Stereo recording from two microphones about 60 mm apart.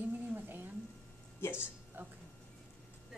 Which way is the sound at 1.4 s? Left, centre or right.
Left.